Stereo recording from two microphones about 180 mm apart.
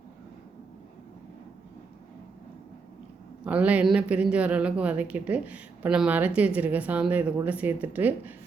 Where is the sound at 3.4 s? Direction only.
10° right (ahead or behind).